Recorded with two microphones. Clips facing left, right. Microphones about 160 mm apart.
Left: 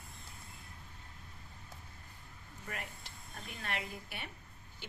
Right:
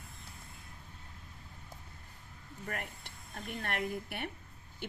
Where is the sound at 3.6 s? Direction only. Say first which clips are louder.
Right 5 dB; 55° right (ahead or behind).